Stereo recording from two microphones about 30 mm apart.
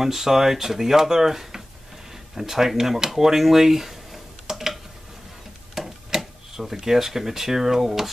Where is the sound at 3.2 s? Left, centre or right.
Centre.